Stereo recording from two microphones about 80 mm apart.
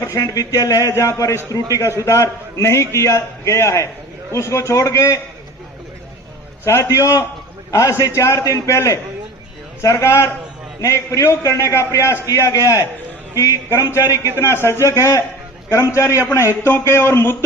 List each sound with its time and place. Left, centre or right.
0.2 s a man's voice: left
6.7 s a man's voice: left
14.0 s a man's voice: right
14.4 s a man's voice: left